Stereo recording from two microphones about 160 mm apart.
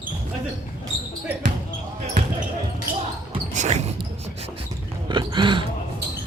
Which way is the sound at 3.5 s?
45° right (ahead or behind).